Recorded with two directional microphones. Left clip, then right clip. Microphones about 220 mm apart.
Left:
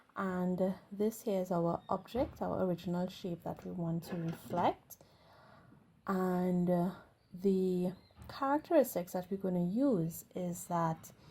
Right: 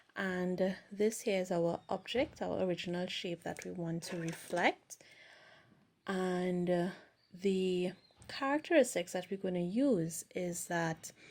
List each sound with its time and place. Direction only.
0.2 s a woman's voice: 15° right (ahead or behind)
4.0 s speech: 40° right (ahead or behind)
6.1 s a woman's voice: 15° right (ahead or behind)